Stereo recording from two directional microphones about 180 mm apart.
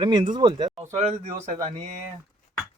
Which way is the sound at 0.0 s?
25° right (ahead or behind).